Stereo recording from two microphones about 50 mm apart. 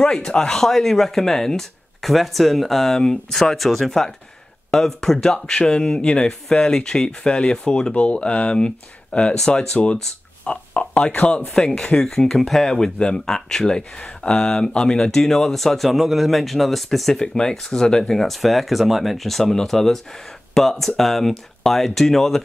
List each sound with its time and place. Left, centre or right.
0.0 s speech: centre
10.4 s speech: left; by 17.2 s centre
17.2 s speech: centre